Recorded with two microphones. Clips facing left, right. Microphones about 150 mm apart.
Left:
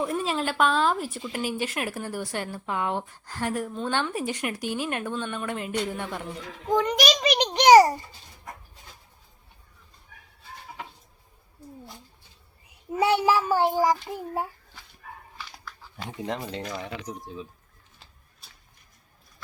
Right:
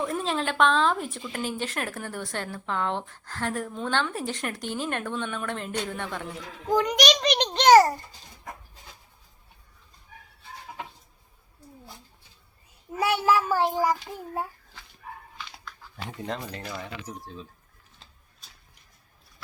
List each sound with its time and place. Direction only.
0.0 s speech: 10° left (ahead or behind)
6.7 s a child's voice: centre (ahead or behind)
12.9 s speech: 20° left (ahead or behind)
16.1 s speech: 15° left (ahead or behind)